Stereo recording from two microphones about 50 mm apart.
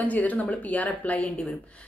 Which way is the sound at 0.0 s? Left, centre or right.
Left.